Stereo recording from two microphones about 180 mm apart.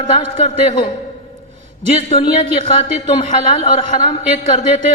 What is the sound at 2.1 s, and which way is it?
A woman's voice, 35° left (ahead or behind).